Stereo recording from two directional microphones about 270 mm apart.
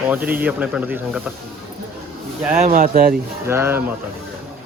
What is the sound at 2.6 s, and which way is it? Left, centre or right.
Speech, right.